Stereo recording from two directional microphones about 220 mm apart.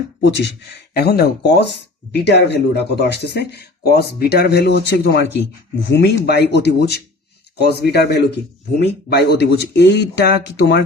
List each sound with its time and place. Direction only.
0.2 s speech: 50° left (ahead or behind)